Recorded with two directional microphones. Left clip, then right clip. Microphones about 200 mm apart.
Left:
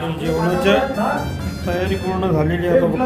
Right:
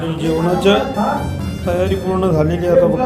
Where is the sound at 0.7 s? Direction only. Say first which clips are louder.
Right 2 dB; 10° right (ahead or behind).